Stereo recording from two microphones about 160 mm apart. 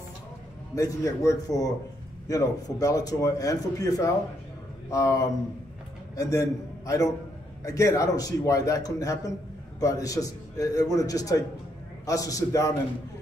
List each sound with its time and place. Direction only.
0.7 s a man's voice: 20° left (ahead or behind)